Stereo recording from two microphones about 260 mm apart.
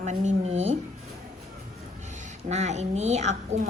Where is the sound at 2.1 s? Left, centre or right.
Right.